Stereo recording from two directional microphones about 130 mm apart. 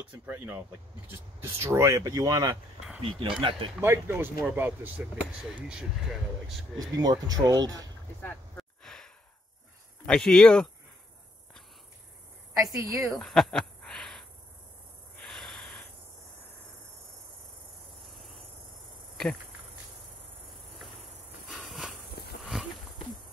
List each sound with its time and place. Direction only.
1.0 s speech: 20° right (ahead or behind)
3.0 s speech: 40° right (ahead or behind)
3.8 s speech: 20° right (ahead or behind); by 6.8 s centre (ahead or behind)
6.8 s speech: 30° right (ahead or behind)
8.2 s a sound: 10° left (ahead or behind)
10.0 s speech: 5° left (ahead or behind)
12.7 s speech: 25° right (ahead or behind)
13.2 s a sound: 5° left (ahead or behind)
15.1 s snort: 5° left (ahead or behind)
20.8 s insect: centre (ahead or behind)
22.4 s horse: centre (ahead or behind)